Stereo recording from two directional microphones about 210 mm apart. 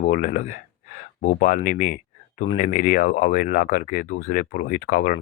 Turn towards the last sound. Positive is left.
turn(degrees=45)  # may be behind; listen again after turning